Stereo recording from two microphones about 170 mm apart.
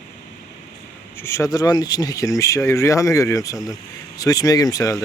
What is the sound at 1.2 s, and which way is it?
Speech, 15° left (ahead or behind).